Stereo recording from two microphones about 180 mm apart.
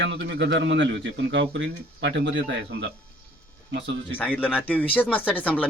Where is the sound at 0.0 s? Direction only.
75° right (ahead or behind).